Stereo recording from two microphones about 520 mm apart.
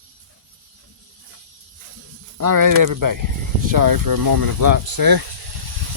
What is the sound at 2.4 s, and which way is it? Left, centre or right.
Speech, right.